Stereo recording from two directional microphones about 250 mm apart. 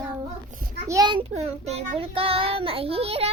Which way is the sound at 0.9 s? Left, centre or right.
Centre.